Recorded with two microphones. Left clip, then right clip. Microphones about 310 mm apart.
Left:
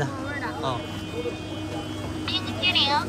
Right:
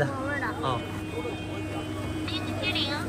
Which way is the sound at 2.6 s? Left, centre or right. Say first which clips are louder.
Left 8 dB; centre.